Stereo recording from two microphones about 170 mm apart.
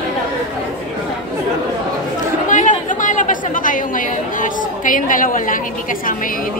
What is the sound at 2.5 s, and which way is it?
A woman's voice, 50° left (ahead or behind).